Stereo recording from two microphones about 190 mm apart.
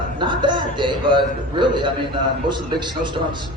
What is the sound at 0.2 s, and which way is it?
A man's voice, 25° right (ahead or behind).